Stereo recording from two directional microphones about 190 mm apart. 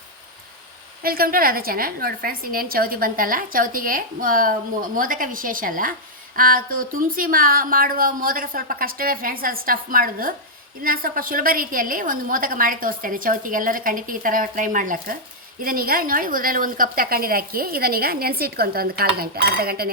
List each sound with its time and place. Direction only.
1.0 s a woman's voice: 50° right (ahead or behind)